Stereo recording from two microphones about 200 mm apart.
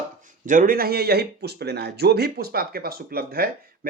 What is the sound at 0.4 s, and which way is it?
Speech, 45° right (ahead or behind).